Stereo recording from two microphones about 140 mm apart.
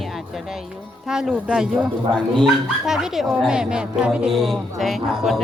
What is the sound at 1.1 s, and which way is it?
Speech, 5° right (ahead or behind).